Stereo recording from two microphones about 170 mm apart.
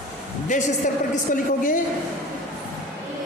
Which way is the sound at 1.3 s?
50° left (ahead or behind).